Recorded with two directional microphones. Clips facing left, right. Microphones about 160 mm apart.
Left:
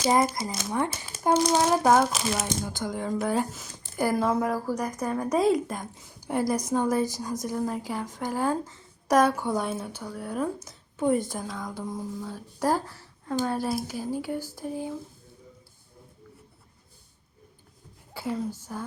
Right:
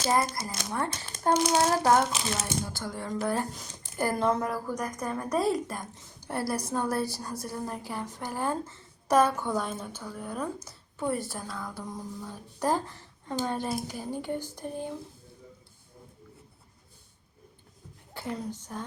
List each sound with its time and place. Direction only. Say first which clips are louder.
0.0 s a woman's voice: left 4 dB; 15° left (ahead or behind)
13.5 s a sound: left 3 dB; 5° left (ahead or behind)
18.1 s a woman's voice: left 4 dB; 10° left (ahead or behind)